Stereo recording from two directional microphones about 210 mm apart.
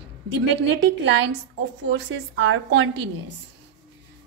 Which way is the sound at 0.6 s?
60° right (ahead or behind).